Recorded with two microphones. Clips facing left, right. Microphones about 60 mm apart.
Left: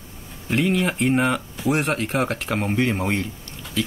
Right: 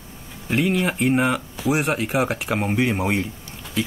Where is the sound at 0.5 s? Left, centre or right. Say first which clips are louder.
Even; centre.